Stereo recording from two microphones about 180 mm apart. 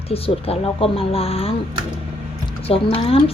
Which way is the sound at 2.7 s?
30° left (ahead or behind).